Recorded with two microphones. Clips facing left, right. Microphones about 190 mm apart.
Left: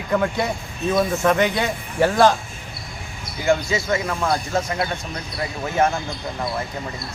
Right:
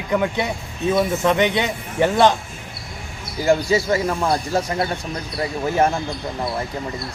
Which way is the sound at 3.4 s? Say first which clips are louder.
Right 3 dB; 35° right (ahead or behind).